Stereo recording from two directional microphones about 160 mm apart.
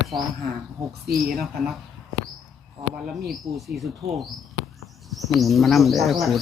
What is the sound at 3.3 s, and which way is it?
Speech, centre (ahead or behind).